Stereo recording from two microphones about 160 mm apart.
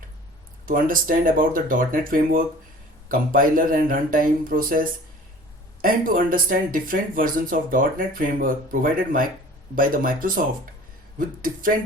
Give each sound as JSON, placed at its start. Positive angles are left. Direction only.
{"t": 0.6, "sound": "speech", "side_deg": -60}